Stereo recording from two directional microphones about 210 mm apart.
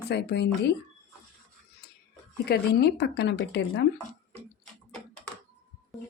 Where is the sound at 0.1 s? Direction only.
55° left (ahead or behind).